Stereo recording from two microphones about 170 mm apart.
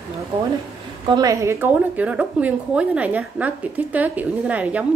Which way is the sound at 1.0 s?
25° right (ahead or behind).